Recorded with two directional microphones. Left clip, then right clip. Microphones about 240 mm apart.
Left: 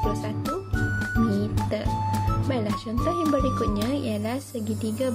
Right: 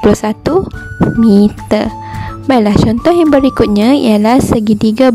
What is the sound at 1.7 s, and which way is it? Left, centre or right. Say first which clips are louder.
A woman's voice: right 12 dB; right.